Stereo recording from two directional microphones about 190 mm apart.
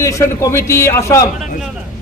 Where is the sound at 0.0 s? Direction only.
15° left (ahead or behind).